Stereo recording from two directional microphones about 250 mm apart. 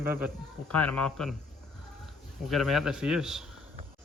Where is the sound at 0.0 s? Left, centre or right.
Centre.